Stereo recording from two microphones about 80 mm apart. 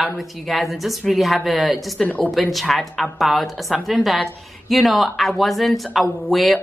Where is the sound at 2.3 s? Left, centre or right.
Centre.